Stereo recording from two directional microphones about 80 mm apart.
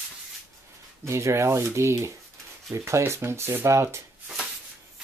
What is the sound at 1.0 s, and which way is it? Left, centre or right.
Speech, right.